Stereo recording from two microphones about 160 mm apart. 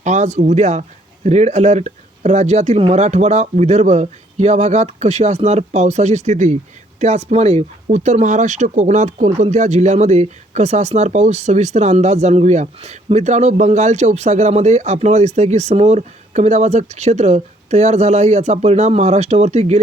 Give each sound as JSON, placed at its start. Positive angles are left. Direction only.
{"t": 0.0, "sound": "speech", "side_deg": -45}